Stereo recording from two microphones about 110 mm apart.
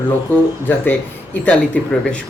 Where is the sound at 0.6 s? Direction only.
20° left (ahead or behind).